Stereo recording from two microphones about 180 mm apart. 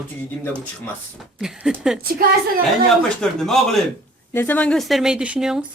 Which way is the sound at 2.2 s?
55° right (ahead or behind).